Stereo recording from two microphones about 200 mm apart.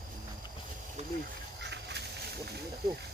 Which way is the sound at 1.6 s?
60° right (ahead or behind).